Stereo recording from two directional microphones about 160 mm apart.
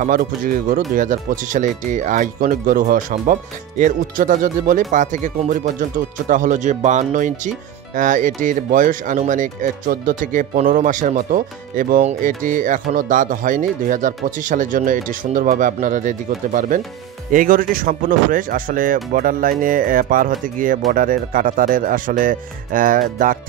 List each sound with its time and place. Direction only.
0.0 s speech: 60° right (ahead or behind)